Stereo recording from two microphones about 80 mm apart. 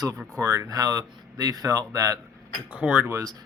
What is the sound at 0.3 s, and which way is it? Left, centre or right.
Speech, right.